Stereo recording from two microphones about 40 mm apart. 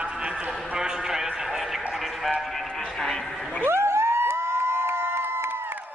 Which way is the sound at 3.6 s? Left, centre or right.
Right.